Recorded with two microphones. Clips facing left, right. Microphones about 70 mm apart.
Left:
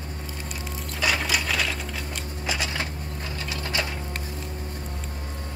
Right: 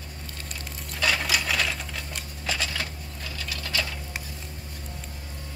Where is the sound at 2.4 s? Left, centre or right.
Centre.